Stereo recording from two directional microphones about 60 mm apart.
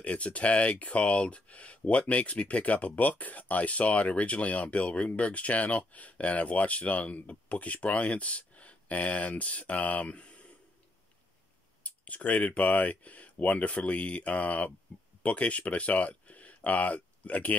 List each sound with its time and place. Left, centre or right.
0.0 s speech: left
11.8 s speech: left
14.9 s a sound: left
15.2 s speech: left